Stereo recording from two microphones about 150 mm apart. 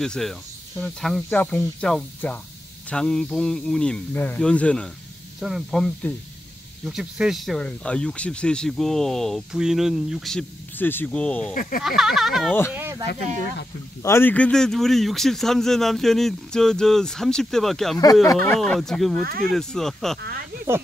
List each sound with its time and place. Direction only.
0.0 s speech: 5° left (ahead or behind)
10.8 s speech: 15° left (ahead or behind)
12.7 s speech: 15° right (ahead or behind)
14.0 s speech: 15° left (ahead or behind)
20.2 s speech: 90° right